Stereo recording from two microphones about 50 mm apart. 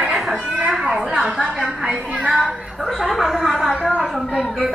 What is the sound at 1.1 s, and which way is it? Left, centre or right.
Speech, centre.